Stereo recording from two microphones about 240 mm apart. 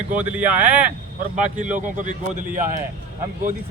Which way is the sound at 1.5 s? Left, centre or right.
Right.